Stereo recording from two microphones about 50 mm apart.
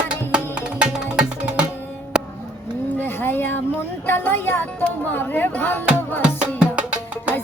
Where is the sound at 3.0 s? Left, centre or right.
Left.